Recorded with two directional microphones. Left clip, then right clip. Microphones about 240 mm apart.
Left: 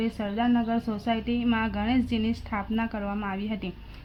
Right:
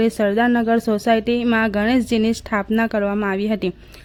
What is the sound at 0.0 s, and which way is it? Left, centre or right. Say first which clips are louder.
A woman's voice: right 11 dB; right.